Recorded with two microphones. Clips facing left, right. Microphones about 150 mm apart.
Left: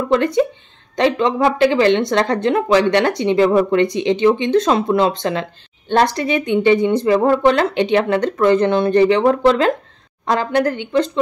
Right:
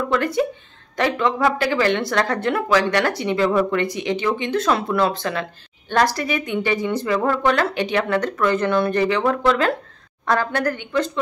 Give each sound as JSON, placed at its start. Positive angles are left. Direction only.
{"t": 0.1, "sound": "speech", "side_deg": 25}